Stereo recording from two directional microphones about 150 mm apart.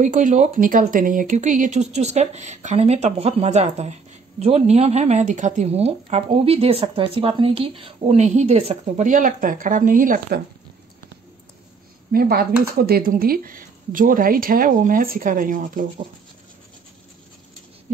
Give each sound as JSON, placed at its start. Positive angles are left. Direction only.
{"t": 0.0, "sound": "speech", "side_deg": -55}
{"t": 12.1, "sound": "speech", "side_deg": -85}